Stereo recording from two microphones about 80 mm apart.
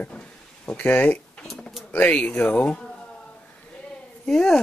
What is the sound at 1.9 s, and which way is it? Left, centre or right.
A man's voice, centre.